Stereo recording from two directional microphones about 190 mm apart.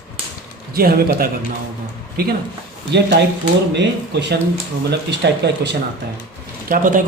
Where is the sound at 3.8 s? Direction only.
65° right (ahead or behind).